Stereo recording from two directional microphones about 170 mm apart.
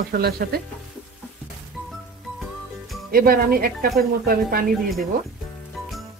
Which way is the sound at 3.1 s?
60° right (ahead or behind).